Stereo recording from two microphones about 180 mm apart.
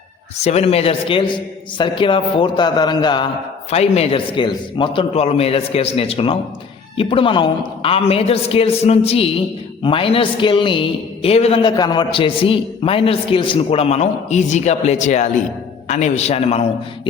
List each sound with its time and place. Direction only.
0.4 s a man's voice: 35° left (ahead or behind)
3.7 s a man's voice: 35° left (ahead or behind)